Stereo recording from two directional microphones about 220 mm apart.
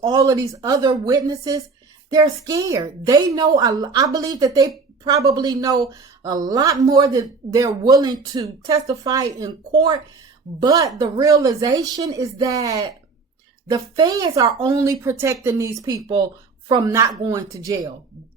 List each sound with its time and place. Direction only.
0.0 s speech: 15° right (ahead or behind)